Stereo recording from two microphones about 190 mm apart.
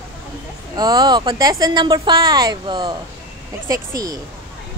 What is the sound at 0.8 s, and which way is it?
Speech, 20° right (ahead or behind).